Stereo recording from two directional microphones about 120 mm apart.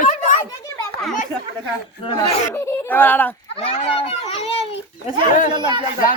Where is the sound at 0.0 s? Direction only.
90° left.